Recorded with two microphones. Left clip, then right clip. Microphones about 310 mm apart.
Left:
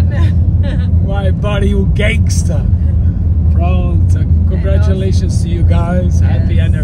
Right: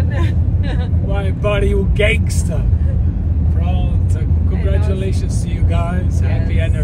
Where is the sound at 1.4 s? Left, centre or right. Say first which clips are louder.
Right 3 dB; centre.